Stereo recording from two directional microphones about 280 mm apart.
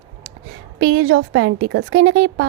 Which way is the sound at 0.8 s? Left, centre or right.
Right.